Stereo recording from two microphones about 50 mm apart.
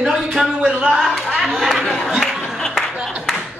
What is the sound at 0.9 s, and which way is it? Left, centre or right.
A man's voice, centre.